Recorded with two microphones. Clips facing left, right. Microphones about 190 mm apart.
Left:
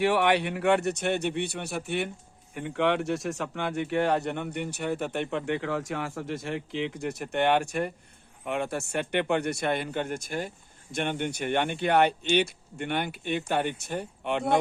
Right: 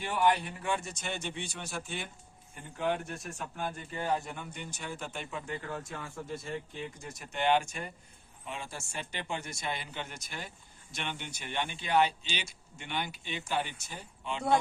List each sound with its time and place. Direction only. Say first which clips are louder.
0.0 s speech: left 6 dB; 75° left (ahead or behind)
2.6 s speech: left 7 dB; 75° left (ahead or behind)